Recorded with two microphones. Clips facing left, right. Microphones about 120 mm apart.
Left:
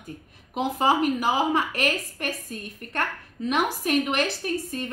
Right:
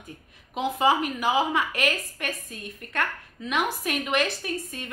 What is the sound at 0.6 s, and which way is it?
A woman's voice, 40° left (ahead or behind).